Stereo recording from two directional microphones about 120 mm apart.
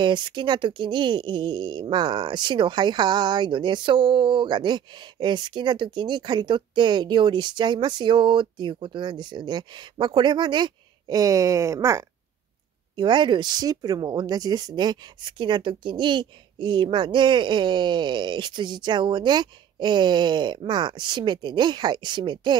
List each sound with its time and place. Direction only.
0.0 s speech: 40° right (ahead or behind)
12.9 s speech: 40° right (ahead or behind)